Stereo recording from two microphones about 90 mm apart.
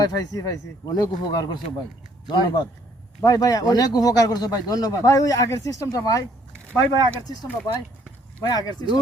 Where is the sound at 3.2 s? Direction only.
45° left (ahead or behind).